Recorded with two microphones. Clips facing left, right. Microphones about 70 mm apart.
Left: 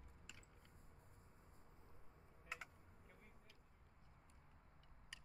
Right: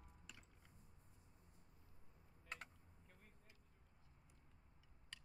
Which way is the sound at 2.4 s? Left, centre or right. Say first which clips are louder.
Left 1 dB; centre.